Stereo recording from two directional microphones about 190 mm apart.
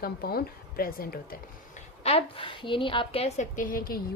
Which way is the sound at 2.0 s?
30° left (ahead or behind).